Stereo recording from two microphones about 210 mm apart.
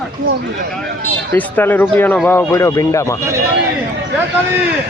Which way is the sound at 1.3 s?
10° left (ahead or behind).